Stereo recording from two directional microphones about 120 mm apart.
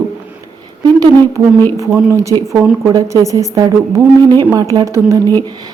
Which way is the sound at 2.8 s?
25° right (ahead or behind).